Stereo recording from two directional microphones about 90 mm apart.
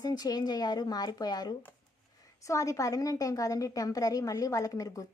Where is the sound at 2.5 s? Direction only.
35° left (ahead or behind).